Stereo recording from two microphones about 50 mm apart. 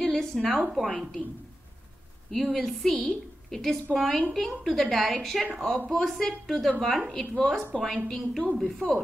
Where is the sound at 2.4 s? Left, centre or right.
Centre.